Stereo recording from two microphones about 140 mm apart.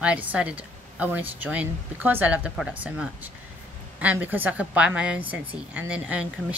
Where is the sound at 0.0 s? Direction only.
10° right (ahead or behind).